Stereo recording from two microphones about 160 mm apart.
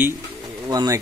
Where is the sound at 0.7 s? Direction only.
25° right (ahead or behind).